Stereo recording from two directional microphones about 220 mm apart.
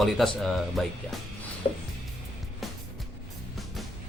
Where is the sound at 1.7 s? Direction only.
40° left (ahead or behind).